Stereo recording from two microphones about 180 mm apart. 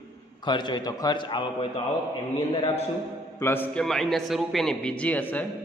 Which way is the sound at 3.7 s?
Centre (ahead or behind).